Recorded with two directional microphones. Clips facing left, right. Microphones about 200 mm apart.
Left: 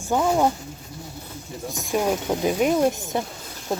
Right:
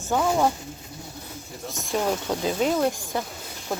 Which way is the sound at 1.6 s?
15° left (ahead or behind).